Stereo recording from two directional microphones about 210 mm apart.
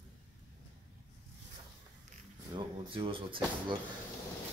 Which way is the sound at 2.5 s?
25° right (ahead or behind).